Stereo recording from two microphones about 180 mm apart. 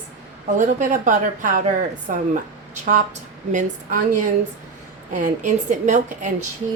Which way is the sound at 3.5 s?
45° right (ahead or behind).